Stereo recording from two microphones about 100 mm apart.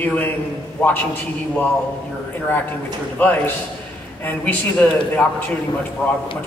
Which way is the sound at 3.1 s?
15° left (ahead or behind).